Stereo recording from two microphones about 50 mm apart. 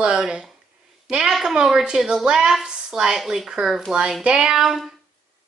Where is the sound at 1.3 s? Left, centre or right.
Centre.